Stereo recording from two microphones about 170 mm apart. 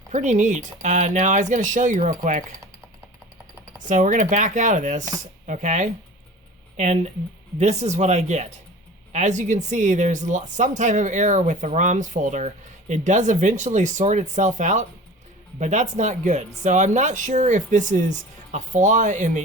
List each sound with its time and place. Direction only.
0.1 s speech: 45° right (ahead or behind)
3.8 s speech: 50° right (ahead or behind)